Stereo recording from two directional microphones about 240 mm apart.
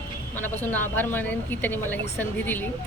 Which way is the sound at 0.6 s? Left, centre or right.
Centre.